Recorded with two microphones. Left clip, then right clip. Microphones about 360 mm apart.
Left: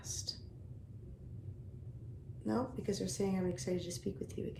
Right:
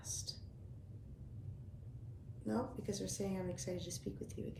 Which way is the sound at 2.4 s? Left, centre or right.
Centre.